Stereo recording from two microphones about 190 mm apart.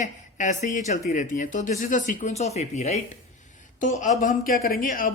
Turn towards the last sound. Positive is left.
turn(degrees=50)  # may be behind; listen again after turning